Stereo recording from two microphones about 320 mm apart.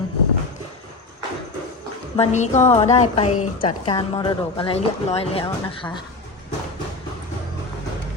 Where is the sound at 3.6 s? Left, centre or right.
Centre.